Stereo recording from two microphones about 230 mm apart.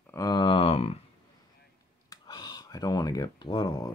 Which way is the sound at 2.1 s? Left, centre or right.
Centre.